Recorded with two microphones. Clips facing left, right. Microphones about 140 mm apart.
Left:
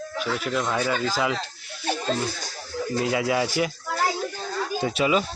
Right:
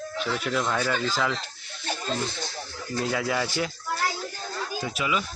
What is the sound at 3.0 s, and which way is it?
Speech, 10° left (ahead or behind).